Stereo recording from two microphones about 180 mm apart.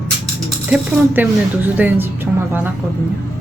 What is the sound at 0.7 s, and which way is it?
Speech, 10° right (ahead or behind).